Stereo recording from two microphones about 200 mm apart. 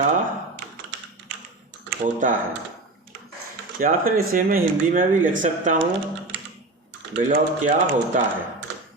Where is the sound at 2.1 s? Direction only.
40° right (ahead or behind).